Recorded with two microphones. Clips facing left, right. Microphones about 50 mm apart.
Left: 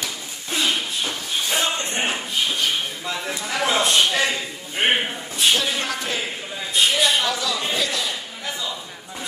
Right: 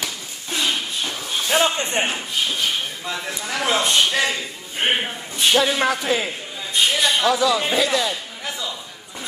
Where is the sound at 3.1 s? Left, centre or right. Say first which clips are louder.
Even; centre.